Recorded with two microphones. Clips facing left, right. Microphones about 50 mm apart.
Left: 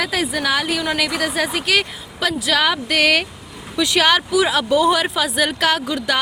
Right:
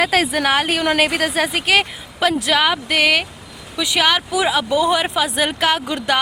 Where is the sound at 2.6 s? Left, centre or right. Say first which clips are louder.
Right 1 dB; centre.